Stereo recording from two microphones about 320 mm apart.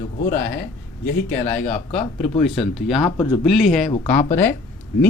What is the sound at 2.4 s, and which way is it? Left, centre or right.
Speech, centre.